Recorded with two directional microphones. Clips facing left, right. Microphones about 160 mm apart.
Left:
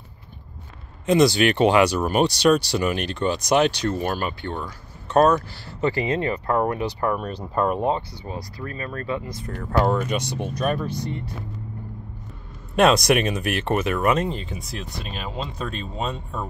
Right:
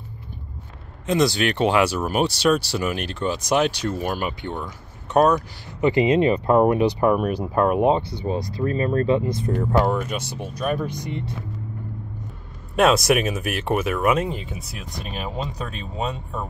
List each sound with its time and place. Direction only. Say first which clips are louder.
1.0 s speech: left 3 dB; centre (ahead or behind)
7.8 s speech: right 5 dB; 20° right (ahead or behind)
9.9 s speech: left 2 dB; 5° right (ahead or behind)
12.7 s speech: even; 5° right (ahead or behind)
15.1 s speech: right 2 dB; 15° right (ahead or behind)